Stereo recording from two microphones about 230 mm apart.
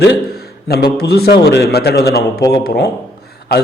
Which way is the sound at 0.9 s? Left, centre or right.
Left.